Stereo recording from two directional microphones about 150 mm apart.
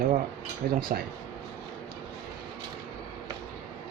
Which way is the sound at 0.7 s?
90° right.